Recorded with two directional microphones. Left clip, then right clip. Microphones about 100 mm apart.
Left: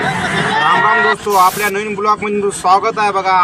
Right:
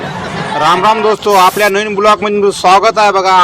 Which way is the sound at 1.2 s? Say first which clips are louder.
Right 4 dB; 65° right (ahead or behind).